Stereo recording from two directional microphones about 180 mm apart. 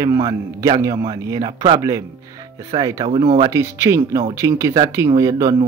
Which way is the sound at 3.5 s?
15° right (ahead or behind).